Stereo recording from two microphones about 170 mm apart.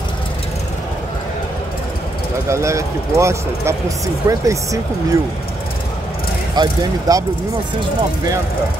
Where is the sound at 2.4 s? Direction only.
15° right (ahead or behind).